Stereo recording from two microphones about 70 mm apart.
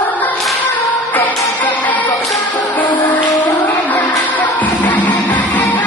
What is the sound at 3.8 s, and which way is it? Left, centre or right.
Music, left.